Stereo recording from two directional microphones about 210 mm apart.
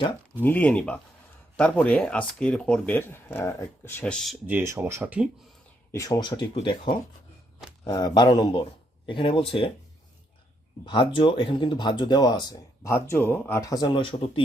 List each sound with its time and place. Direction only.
0.4 s speech: 10° left (ahead or behind)
5.9 s speech: 15° left (ahead or behind)
10.8 s speech: 25° left (ahead or behind)